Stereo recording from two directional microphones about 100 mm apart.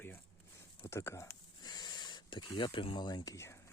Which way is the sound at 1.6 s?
45° left (ahead or behind).